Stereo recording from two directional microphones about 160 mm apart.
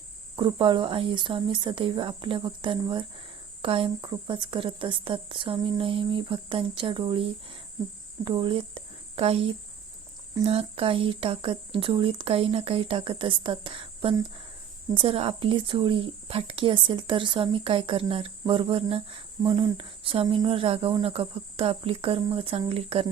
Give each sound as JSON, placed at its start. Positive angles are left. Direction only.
{"t": 0.3, "sound": "speech", "side_deg": -30}
{"t": 10.4, "sound": "speech", "side_deg": -40}